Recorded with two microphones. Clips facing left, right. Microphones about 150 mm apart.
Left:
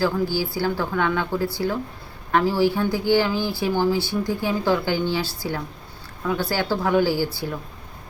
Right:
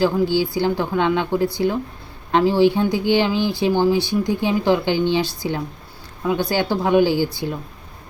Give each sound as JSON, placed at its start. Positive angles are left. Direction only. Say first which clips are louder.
{"t": 0.0, "sound": "speech", "louder": "right 4 dB", "side_deg": -20}